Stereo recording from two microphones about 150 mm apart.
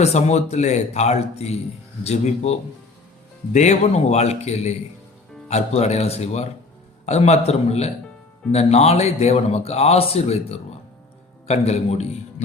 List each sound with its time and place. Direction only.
0.0 s a man's voice: 50° left (ahead or behind)
11.4 s a man's voice: 45° left (ahead or behind)